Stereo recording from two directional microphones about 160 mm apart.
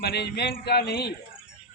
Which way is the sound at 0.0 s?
85° left.